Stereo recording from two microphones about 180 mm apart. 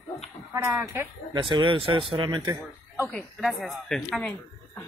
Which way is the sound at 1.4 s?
25° right (ahead or behind).